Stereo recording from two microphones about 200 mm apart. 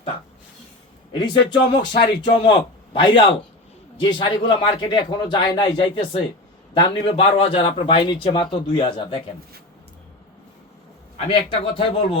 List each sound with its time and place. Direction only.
1.2 s a man's voice: 20° left (ahead or behind)
11.3 s a man's voice: 25° left (ahead or behind)